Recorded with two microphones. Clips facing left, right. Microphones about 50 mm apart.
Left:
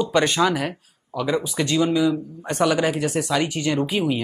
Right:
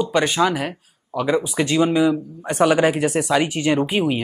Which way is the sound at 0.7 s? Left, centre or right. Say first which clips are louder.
Right 4 dB; right.